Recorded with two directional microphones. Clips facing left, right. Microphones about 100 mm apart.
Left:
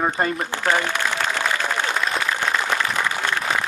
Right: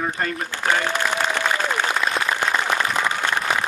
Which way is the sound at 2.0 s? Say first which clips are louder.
Right 1 dB; 10° right (ahead or behind).